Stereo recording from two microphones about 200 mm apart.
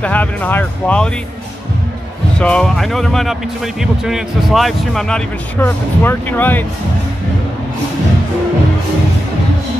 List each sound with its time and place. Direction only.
0.0 s speech: 10° left (ahead or behind)
2.3 s speech: 5° left (ahead or behind)